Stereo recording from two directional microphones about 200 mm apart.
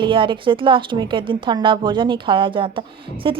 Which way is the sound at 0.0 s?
25° right (ahead or behind).